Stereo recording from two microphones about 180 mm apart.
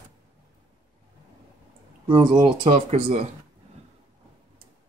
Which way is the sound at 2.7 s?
40° right (ahead or behind).